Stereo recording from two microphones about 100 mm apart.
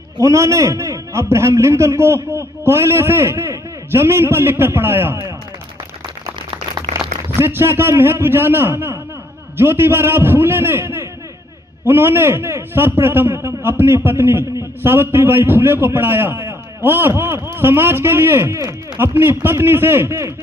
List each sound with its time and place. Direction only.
0.2 s a man's voice: 30° right (ahead or behind)
7.3 s a man's voice: 25° right (ahead or behind)